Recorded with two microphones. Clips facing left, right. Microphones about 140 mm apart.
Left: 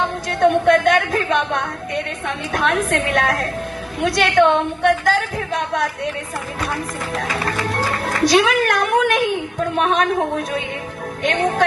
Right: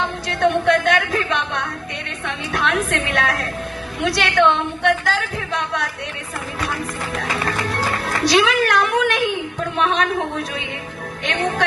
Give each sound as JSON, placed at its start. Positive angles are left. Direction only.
{"t": 0.3, "sound": "a sound", "side_deg": 45}
{"t": 2.2, "sound": "a woman's voice", "side_deg": 45}
{"t": 8.0, "sound": "music", "side_deg": 50}
{"t": 9.7, "sound": "a woman's voice", "side_deg": 45}